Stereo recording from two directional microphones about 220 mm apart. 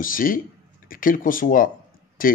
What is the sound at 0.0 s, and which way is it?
Speech, 40° left (ahead or behind).